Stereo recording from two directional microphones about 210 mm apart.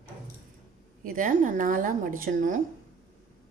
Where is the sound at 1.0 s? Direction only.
40° right (ahead or behind).